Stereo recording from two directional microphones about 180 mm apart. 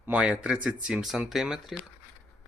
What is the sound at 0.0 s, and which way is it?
Speech, 5° right (ahead or behind).